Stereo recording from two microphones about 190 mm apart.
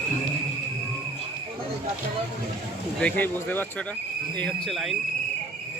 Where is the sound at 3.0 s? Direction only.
10° left (ahead or behind).